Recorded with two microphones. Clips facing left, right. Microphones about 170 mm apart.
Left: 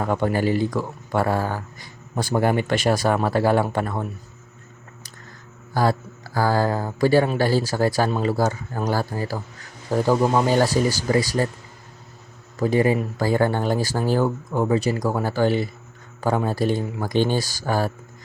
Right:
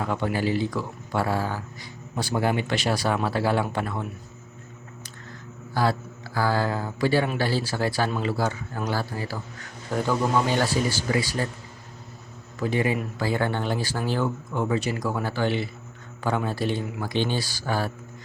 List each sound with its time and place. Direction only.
0.0 s speech: 45° left (ahead or behind)
5.7 s speech: 45° left (ahead or behind)
12.5 s speech: 40° left (ahead or behind)